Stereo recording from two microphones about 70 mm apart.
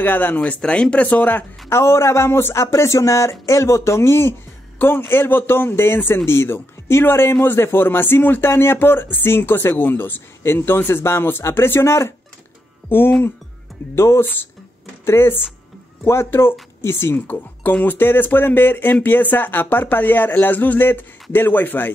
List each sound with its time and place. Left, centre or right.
0.0 s speech: left
1.7 s speech: left
12.9 s speech: left